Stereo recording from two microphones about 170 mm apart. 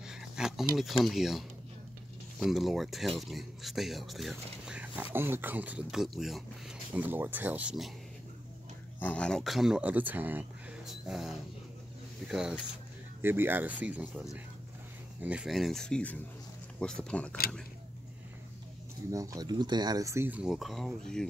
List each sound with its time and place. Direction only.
0.0 s a sound: 5° right (ahead or behind)
0.7 s speech: centre (ahead or behind)
2.4 s speech: centre (ahead or behind)
9.0 s speech: 5° left (ahead or behind)
15.2 s speech: 5° right (ahead or behind)
19.1 s speech: 20° right (ahead or behind); by 21.3 s 5° left (ahead or behind)